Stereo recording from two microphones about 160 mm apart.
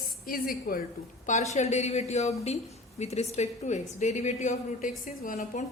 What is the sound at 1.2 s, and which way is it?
A woman's voice, 45° left (ahead or behind).